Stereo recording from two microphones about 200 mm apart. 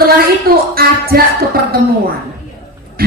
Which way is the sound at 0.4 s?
50° right (ahead or behind).